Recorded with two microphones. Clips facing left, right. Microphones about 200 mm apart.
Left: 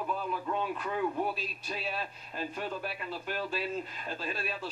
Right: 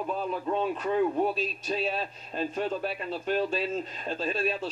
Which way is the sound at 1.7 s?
25° right (ahead or behind).